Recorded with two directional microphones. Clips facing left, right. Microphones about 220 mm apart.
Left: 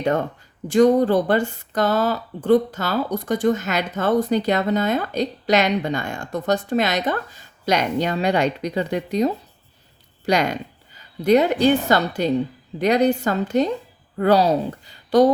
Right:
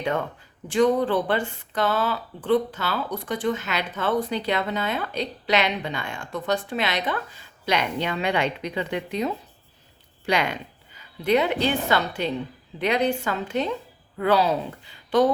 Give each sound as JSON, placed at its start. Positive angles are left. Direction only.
{"t": 0.0, "sound": "a woman's voice", "side_deg": 40}